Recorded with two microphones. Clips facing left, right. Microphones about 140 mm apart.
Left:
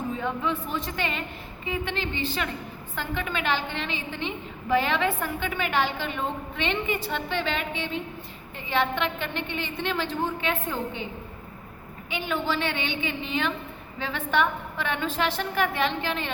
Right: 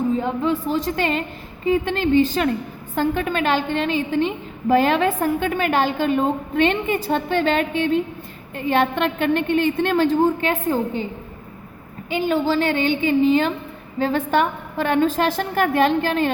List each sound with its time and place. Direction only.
0.6 s a woman's voice: 35° right (ahead or behind)
12.1 s a woman's voice: 40° right (ahead or behind)